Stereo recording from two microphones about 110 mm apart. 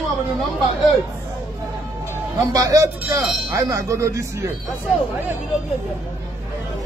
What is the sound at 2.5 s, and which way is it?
Speech, 35° right (ahead or behind).